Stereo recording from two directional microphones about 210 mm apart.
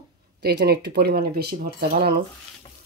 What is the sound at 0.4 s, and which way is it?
Speech, 50° right (ahead or behind).